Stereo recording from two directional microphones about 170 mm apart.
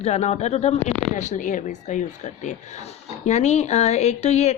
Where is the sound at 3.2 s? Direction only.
40° left (ahead or behind).